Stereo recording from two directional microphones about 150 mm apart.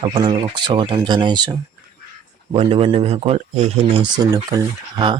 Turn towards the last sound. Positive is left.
turn(degrees=-30)  # may be behind; listen again after turning